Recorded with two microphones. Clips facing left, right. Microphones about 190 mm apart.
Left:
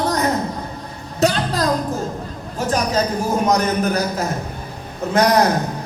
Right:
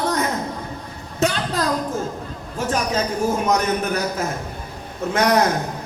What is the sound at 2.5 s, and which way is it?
Music, 35° left (ahead or behind).